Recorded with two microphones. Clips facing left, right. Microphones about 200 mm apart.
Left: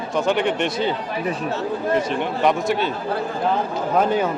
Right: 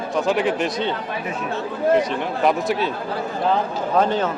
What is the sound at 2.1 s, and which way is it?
Speech, centre (ahead or behind).